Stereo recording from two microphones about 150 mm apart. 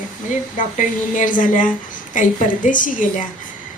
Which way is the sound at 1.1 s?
60° left (ahead or behind).